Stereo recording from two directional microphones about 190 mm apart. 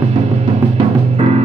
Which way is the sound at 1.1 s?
35° right (ahead or behind).